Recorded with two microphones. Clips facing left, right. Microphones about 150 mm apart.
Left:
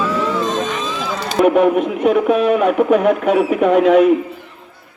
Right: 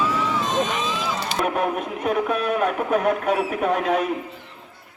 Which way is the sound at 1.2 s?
60° left (ahead or behind).